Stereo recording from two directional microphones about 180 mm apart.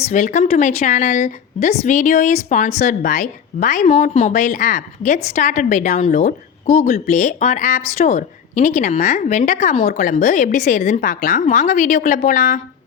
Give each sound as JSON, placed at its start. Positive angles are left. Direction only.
{"t": 0.1, "sound": "a woman's voice", "side_deg": 40}